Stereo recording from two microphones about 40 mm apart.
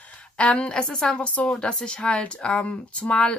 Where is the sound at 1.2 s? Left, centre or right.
Left.